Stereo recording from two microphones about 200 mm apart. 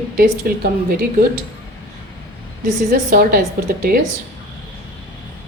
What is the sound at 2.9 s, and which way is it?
Speech, 45° right (ahead or behind).